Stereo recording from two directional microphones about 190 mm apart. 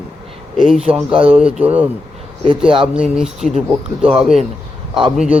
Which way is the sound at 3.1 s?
5° right (ahead or behind).